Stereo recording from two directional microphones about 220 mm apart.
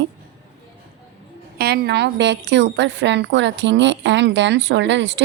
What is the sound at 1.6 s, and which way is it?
A woman's voice, 45° right (ahead or behind).